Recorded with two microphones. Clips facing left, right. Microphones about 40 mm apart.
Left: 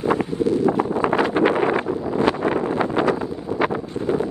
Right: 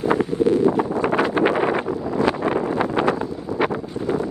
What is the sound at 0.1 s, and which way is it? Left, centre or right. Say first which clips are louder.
Wind noise: right 2 dB; right.